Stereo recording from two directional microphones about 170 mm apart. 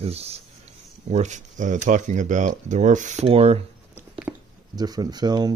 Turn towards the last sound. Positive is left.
turn(degrees=-25)  # may be behind; listen again after turning